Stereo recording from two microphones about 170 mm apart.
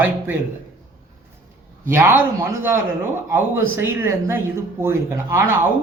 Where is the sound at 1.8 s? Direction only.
15° right (ahead or behind).